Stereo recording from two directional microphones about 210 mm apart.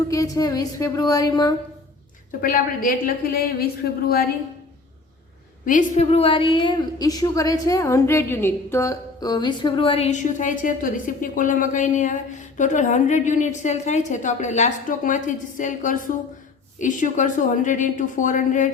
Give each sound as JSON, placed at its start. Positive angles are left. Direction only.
{"t": 0.1, "sound": "a woman's voice", "side_deg": 15}
{"t": 2.4, "sound": "a woman's voice", "side_deg": 45}
{"t": 5.6, "sound": "a woman's voice", "side_deg": 35}